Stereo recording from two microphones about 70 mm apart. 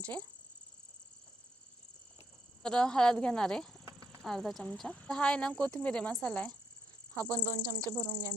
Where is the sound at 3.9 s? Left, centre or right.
Right.